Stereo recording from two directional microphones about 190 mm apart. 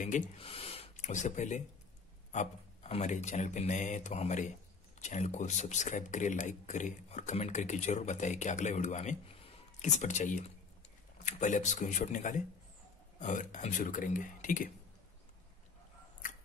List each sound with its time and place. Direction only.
0.0 s speech: 40° left (ahead or behind)
0.4 s speech: 30° left (ahead or behind)